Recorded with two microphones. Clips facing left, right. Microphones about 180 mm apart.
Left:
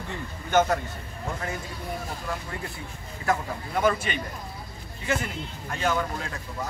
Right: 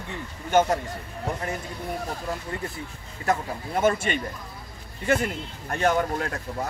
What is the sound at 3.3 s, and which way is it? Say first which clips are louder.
Speech: right 1 dB; 40° right (ahead or behind).